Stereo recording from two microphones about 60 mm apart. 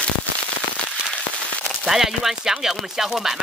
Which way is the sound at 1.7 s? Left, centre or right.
Centre.